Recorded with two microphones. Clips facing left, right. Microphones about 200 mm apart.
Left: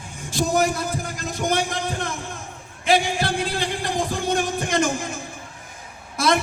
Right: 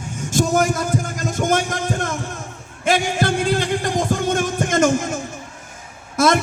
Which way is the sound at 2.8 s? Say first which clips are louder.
Right 2 dB; 45° right (ahead or behind).